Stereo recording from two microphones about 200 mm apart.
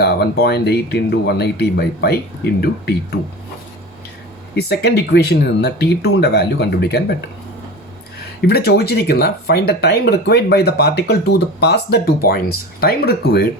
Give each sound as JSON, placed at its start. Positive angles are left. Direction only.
{"t": 0.0, "sound": "speech", "side_deg": 55}
{"t": 4.5, "sound": "speech", "side_deg": 55}
{"t": 8.4, "sound": "speech", "side_deg": 55}